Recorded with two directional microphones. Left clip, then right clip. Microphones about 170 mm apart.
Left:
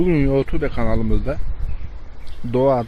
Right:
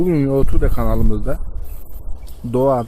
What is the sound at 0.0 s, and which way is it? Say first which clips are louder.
Speech: right 1 dB; centre (ahead or behind).